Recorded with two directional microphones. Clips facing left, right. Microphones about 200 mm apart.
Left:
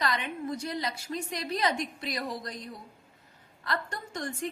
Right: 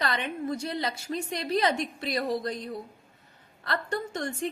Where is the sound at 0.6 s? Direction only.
25° right (ahead or behind).